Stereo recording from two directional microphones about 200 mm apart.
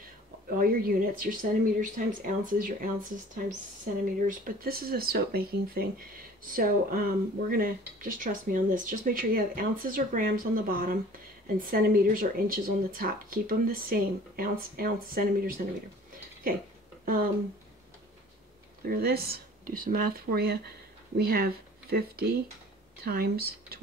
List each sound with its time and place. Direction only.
0.5 s speech: 45° right (ahead or behind)
17.0 s speech: 45° right (ahead or behind)
18.9 s speech: 50° right (ahead or behind)